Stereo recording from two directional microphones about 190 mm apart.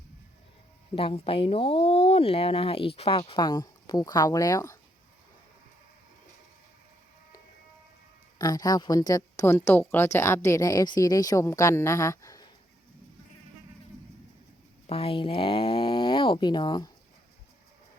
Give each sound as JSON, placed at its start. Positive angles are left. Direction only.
{"t": 0.9, "sound": "speech", "side_deg": 30}
{"t": 8.4, "sound": "a woman's voice", "side_deg": 20}
{"t": 14.8, "sound": "speech", "side_deg": 30}